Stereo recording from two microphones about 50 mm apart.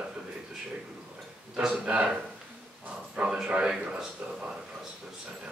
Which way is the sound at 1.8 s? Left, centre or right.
Right.